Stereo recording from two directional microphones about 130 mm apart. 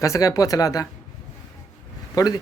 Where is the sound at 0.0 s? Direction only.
25° left (ahead or behind).